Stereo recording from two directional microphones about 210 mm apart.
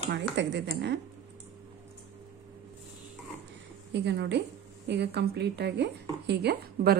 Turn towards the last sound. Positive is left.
turn(degrees=-50)  # may be behind; listen again after turning